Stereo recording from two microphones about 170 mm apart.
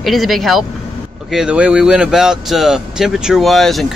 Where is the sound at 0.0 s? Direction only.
Centre (ahead or behind).